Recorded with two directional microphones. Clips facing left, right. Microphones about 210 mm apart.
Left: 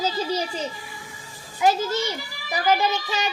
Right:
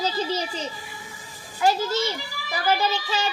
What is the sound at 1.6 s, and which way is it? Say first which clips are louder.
A child's voice: left 1 dB; 15° left (ahead or behind).